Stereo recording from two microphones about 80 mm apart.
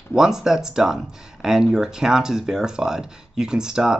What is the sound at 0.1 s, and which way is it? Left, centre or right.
Speech, centre.